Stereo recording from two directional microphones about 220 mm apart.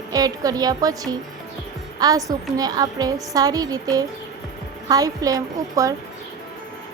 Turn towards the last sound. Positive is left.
turn(degrees=-15)  # may be behind; listen again after turning